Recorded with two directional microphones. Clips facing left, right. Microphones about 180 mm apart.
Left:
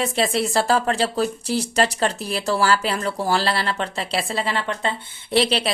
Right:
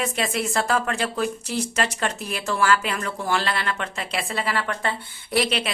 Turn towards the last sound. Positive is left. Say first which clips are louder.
# left 3 dB
turn(degrees=30)  # may be behind; listen again after turning